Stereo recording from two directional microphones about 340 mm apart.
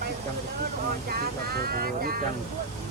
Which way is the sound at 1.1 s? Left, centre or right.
Right.